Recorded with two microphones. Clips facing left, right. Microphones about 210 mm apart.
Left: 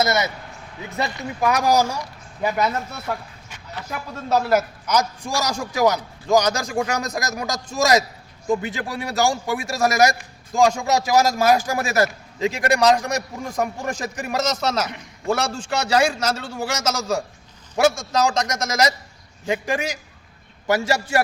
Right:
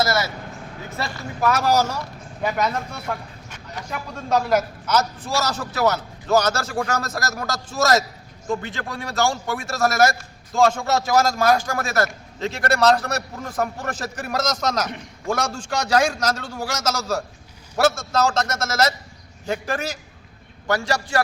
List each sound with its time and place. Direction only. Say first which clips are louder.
0.0 s a man's voice: left 1 dB; 20° left (ahead or behind)
12.0 s a man's voice: left 4 dB; centre (ahead or behind)
12.6 s a man's voice: even; 15° left (ahead or behind)
19.5 s a man's voice: left 2 dB; 10° left (ahead or behind)
20.7 s a man's voice: left 2 dB; 20° left (ahead or behind)